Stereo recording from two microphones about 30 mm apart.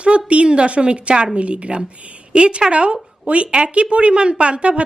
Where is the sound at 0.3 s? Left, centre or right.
Right.